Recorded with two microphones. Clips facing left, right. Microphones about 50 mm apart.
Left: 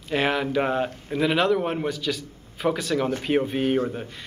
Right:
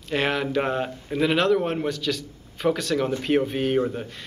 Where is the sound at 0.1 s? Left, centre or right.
Centre.